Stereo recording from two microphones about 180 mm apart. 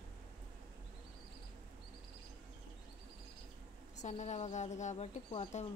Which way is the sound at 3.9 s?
40° left (ahead or behind).